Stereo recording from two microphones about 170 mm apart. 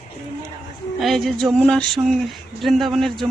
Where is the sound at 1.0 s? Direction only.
Centre (ahead or behind).